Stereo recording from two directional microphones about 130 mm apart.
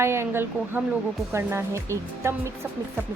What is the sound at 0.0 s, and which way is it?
Speech, 20° right (ahead or behind).